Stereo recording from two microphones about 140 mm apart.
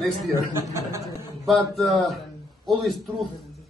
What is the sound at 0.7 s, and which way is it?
Speech, 20° right (ahead or behind).